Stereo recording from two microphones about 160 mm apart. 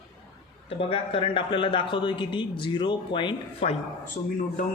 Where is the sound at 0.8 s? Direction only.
35° left (ahead or behind).